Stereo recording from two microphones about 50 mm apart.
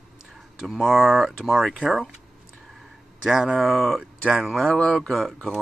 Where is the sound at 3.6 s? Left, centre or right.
Centre.